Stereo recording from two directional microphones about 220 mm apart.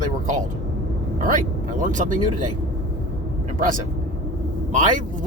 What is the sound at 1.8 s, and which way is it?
Speech, 35° right (ahead or behind).